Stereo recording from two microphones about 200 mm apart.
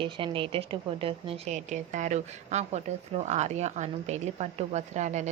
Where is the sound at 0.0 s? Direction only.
25° right (ahead or behind).